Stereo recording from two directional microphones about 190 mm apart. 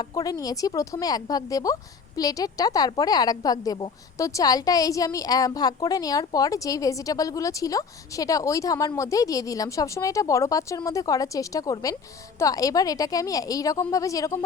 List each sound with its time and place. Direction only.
0.0 s a woman's voice: 20° left (ahead or behind)